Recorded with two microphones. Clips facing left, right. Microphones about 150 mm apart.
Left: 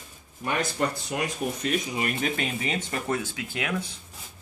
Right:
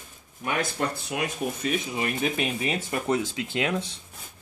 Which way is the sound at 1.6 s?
15° right (ahead or behind).